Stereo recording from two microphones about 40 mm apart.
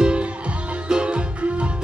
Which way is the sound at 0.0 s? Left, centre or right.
Right.